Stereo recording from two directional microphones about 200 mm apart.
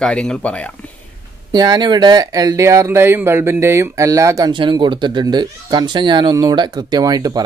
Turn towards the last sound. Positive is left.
turn(degrees=-20)  # may be behind; listen again after turning